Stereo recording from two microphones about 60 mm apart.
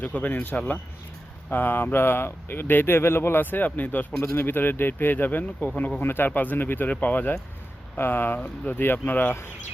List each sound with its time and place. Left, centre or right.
0.0 s speech: left
1.5 s speech: left
4.2 s speech: left